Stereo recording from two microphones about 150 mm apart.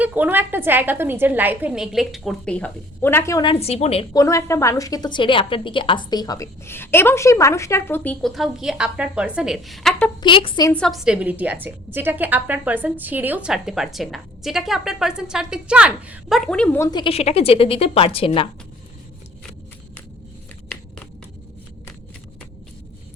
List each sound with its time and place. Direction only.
0.0 s a woman's voice: 10° right (ahead or behind); by 3.4 s 15° left (ahead or behind)
3.4 s a woman's voice: 40° left (ahead or behind)
4.1 s a woman's voice: 20° left (ahead or behind)
8.2 s a woman's voice: centre (ahead or behind)
10.2 s a woman's voice: 35° left (ahead or behind)
10.7 s a woman's voice: 5° left (ahead or behind)
16.9 s a woman's voice: 35° left (ahead or behind)